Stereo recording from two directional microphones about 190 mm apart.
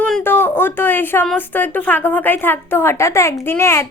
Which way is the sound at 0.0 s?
10° left (ahead or behind).